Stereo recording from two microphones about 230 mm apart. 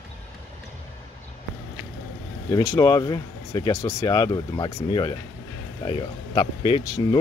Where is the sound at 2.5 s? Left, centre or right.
Centre.